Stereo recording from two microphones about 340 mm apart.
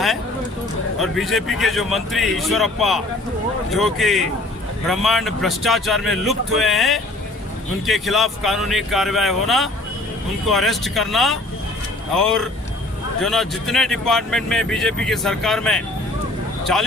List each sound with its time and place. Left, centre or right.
0.9 s speech: centre